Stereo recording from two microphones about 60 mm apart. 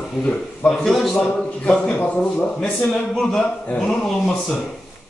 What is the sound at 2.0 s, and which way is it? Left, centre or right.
A man's voice, left.